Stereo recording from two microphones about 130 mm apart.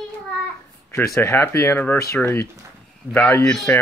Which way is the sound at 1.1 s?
20° left (ahead or behind).